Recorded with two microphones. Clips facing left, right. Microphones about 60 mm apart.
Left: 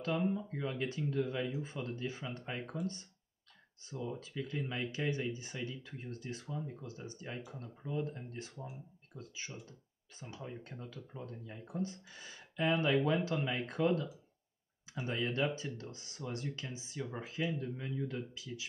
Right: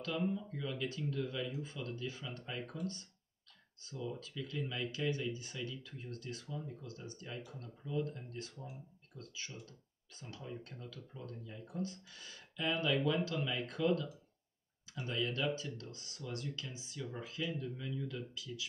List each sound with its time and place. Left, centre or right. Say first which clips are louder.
0.0 s speech: left 3 dB; left
9.7 s clicking: left 2 dB; left
10.4 s speech: left 1 dB; left